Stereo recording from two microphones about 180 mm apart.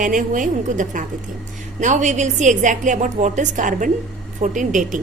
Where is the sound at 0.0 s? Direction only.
45° right (ahead or behind).